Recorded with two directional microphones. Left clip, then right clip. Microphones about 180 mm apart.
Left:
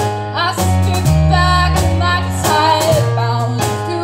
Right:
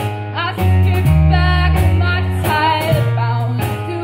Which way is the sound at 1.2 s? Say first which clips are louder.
Left 6 dB; 50° left (ahead or behind).